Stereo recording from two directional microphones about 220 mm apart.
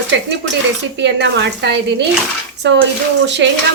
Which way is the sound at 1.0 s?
50° right (ahead or behind).